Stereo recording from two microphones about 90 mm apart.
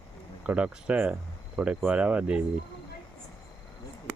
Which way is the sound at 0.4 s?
10° right (ahead or behind).